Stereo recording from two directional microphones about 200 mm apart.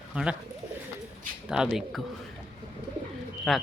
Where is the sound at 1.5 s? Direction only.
5° right (ahead or behind).